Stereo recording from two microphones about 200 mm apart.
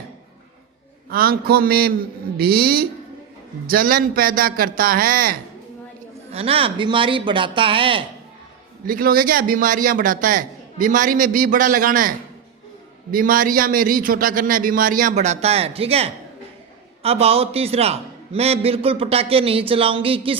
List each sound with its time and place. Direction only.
1.1 s a man's voice: 50° right (ahead or behind)
6.3 s speech: 30° right (ahead or behind)
8.9 s a man's voice: 45° right (ahead or behind); by 20.3 s 25° right (ahead or behind)